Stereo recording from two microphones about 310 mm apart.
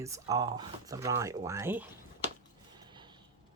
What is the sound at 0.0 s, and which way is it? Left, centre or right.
Speech, centre.